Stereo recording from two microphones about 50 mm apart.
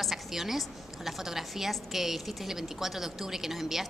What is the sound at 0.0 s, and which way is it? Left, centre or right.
A woman's voice, centre.